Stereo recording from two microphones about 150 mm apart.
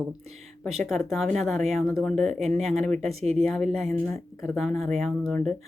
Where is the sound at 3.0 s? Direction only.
45° right (ahead or behind).